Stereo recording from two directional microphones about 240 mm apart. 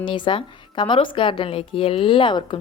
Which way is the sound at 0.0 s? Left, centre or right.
Left.